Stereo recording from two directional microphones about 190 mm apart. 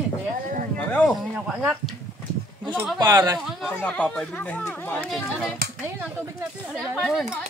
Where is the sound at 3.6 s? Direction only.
5° left (ahead or behind).